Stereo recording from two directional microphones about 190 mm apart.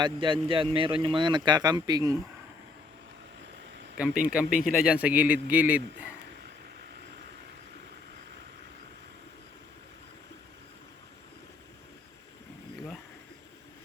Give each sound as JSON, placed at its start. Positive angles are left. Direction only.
{"t": 0.0, "sound": "speech", "side_deg": -25}
{"t": 3.9, "sound": "a man's voice", "side_deg": -5}